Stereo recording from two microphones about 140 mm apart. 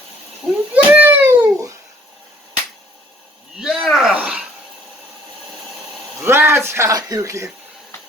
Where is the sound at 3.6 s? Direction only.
Centre (ahead or behind).